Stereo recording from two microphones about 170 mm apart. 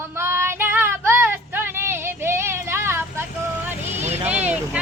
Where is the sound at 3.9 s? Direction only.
40° right (ahead or behind).